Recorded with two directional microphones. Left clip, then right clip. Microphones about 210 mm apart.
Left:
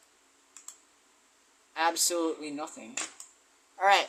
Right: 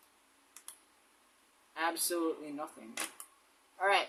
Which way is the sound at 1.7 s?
30° left (ahead or behind).